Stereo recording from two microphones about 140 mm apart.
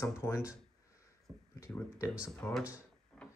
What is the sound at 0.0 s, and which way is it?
Speech, 20° left (ahead or behind).